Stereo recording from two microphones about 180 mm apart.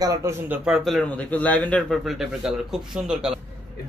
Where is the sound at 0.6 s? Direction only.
Centre (ahead or behind).